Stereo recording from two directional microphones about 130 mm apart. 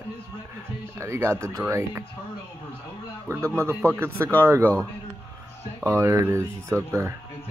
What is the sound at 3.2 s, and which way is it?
Speech, 20° right (ahead or behind).